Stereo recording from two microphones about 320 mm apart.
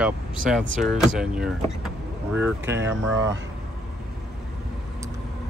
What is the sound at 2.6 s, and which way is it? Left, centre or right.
Speech, right.